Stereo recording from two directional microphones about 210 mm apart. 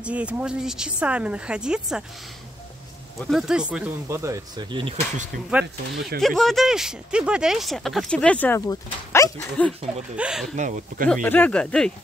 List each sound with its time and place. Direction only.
0.0 s speech: 5° right (ahead or behind)
3.2 s speech: centre (ahead or behind); by 4.9 s 20° right (ahead or behind)
5.5 s speech: 5° right (ahead or behind); by 9.7 s 15° left (ahead or behind)
10.1 s speech: 5° right (ahead or behind)
10.5 s speech: 35° right (ahead or behind)
11.2 s speech: 5° left (ahead or behind)